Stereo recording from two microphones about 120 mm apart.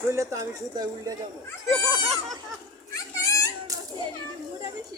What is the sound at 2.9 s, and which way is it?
Children playing, 30° left (ahead or behind).